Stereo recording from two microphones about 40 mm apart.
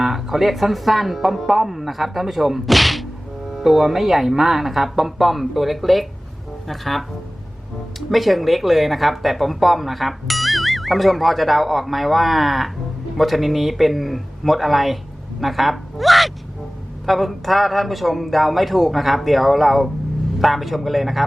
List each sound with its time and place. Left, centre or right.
0.0 s speech: centre
8.1 s speech: centre